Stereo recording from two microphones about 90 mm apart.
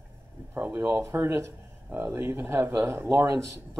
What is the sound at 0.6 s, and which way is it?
Speech, 25° right (ahead or behind).